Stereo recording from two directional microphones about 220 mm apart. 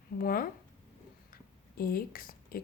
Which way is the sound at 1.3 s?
40° left (ahead or behind).